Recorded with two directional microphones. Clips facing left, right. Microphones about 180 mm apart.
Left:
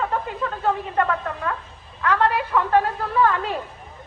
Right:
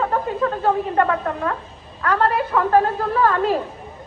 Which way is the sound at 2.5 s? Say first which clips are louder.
Right 5 dB; 35° right (ahead or behind).